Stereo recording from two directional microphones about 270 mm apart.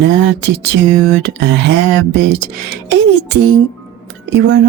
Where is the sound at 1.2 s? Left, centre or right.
Right.